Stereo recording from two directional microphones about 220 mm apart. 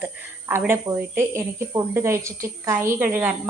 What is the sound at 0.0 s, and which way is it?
A woman's voice, 10° right (ahead or behind).